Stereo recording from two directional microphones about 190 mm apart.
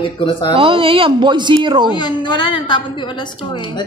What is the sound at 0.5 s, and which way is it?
Speech, 30° right (ahead or behind).